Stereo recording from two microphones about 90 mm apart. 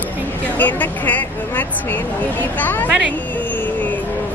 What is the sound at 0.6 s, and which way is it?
A woman's voice, 20° left (ahead or behind).